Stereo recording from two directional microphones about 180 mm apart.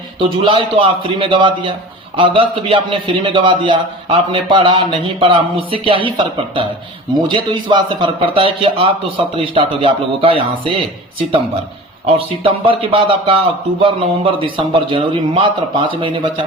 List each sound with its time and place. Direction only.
0.2 s a man's voice: 30° right (ahead or behind)
12.0 s a man's voice: 30° right (ahead or behind)